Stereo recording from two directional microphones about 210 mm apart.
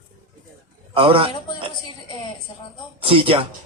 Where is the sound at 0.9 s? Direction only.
25° right (ahead or behind).